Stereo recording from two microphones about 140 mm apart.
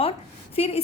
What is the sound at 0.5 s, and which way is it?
Speech, 45° left (ahead or behind).